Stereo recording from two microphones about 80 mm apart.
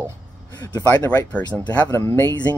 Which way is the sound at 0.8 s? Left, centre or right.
Left.